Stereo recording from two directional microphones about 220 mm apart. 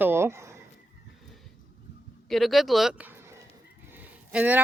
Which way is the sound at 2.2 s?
Centre (ahead or behind).